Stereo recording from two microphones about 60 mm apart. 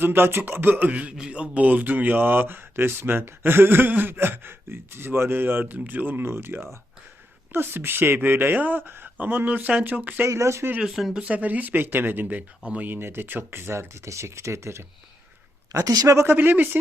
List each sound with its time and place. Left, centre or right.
0.0 s speech: right
10.2 s speech: right
10.8 s speech: centre
11.2 s speech: right
12.9 s speech: right
15.7 s a woman's voice: right
16.3 s speech: right